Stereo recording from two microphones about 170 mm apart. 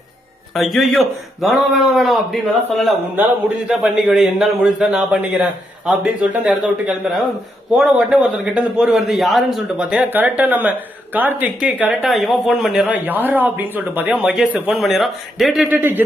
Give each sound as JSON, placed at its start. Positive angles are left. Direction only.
{"t": 0.5, "sound": "a man's voice", "side_deg": 0}
{"t": 15.7, "sound": "a man's voice", "side_deg": -10}